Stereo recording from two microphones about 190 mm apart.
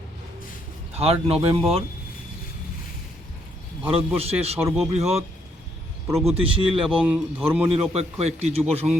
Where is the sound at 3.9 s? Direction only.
30° right (ahead or behind).